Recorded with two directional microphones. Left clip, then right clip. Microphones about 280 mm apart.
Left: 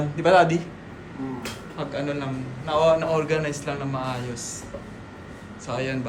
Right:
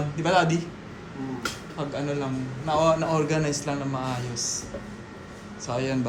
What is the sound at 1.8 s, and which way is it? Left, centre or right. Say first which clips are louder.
A man's voice: left 1 dB; centre.